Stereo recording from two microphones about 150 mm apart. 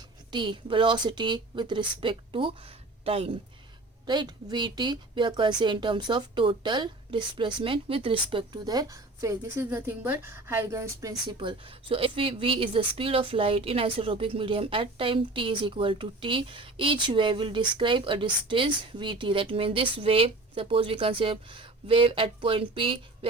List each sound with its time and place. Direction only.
0.3 s speech: 35° right (ahead or behind)
4.0 s speech: 30° right (ahead or behind)
11.3 s speech: 35° right (ahead or behind)